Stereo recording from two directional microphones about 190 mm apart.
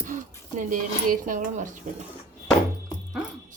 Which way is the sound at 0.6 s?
45° right (ahead or behind).